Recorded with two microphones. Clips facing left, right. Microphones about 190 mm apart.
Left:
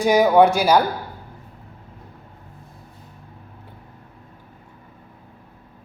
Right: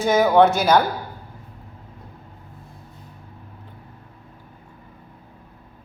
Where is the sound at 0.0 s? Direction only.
15° left (ahead or behind).